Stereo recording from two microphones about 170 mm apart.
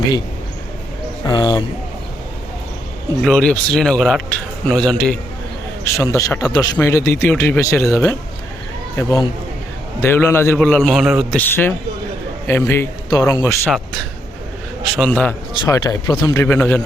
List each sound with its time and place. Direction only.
1.3 s speech: 25° left (ahead or behind)
3.2 s speech: 5° left (ahead or behind)
5.8 s speech: 20° left (ahead or behind); by 11.3 s centre (ahead or behind)
11.3 s speech: 10° left (ahead or behind)
14.9 s speech: 5° left (ahead or behind)
15.5 s speech: 25° left (ahead or behind)